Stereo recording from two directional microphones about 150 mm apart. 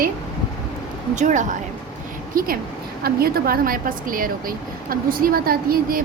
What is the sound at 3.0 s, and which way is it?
A woman's voice, 90° right.